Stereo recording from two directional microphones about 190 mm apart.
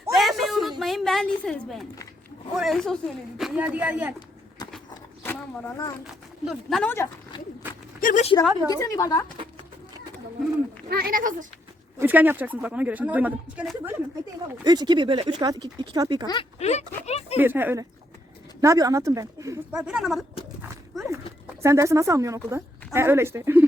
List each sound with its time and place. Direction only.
0.1 s a sound: centre (ahead or behind)
2.6 s speech: centre (ahead or behind)
6.4 s speech: centre (ahead or behind)
6.9 s speech: 20° left (ahead or behind)
8.0 s speech: 40° left (ahead or behind)
8.7 s a woman's voice: 15° left (ahead or behind)
10.8 s speech: 50° right (ahead or behind)
11.9 s speech: 10° right (ahead or behind)
14.6 s speech: 20° right (ahead or behind)
16.2 s speech: 20° left (ahead or behind)
16.6 s speech: 35° left (ahead or behind)
17.3 s speech: 10° right (ahead or behind)
19.7 s speech: 5° right (ahead or behind)
21.6 s speech: 15° right (ahead or behind)